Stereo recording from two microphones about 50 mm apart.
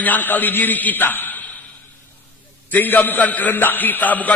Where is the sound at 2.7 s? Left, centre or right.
Left.